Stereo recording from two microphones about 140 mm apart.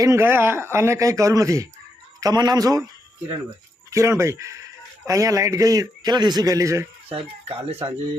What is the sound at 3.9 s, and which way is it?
A man's voice, 20° right (ahead or behind).